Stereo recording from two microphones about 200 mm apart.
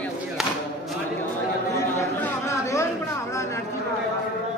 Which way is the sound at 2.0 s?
10° left (ahead or behind).